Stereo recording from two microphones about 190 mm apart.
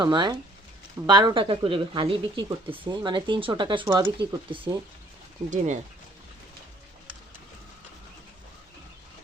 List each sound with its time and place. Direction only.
0.0 s speech: 25° right (ahead or behind)
5.5 s speech: 40° right (ahead or behind)